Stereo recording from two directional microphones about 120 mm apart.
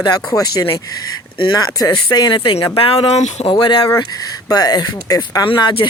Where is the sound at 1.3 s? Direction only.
45° left (ahead or behind).